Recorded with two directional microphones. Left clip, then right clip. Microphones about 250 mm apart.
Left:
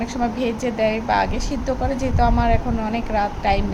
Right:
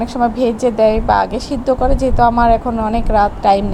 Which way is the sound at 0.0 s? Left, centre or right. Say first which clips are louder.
Right 8 dB; centre.